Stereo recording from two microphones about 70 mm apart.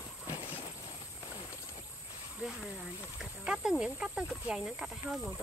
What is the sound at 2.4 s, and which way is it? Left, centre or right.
Speech, centre.